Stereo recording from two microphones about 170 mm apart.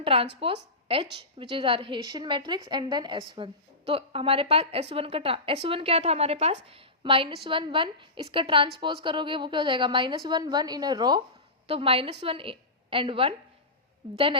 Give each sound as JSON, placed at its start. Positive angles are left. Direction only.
{"t": 0.0, "sound": "a woman's voice", "side_deg": -35}